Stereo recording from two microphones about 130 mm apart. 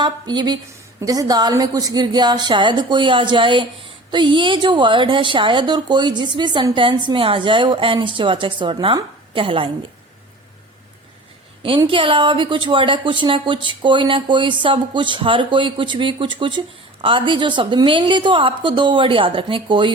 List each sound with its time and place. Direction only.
0.0 s a woman's voice: 35° right (ahead or behind)
11.9 s a woman's voice: 40° right (ahead or behind)